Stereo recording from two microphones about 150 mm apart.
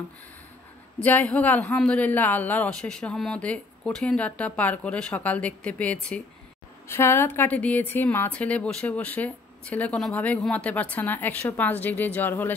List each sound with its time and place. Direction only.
0.9 s a woman's voice: 10° left (ahead or behind)